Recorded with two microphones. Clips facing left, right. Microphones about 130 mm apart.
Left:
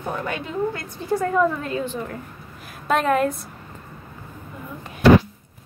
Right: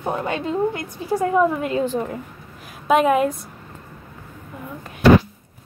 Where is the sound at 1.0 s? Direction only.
15° right (ahead or behind).